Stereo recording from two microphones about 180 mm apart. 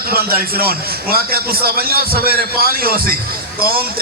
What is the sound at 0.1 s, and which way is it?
A man's voice, 55° right (ahead or behind).